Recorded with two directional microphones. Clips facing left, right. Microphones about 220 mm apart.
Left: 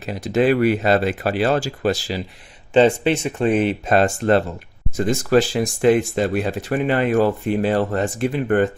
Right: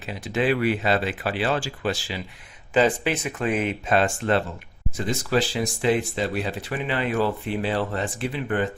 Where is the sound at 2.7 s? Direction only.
25° left (ahead or behind).